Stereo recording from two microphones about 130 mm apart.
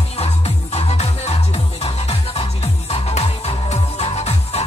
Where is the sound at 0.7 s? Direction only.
55° left (ahead or behind).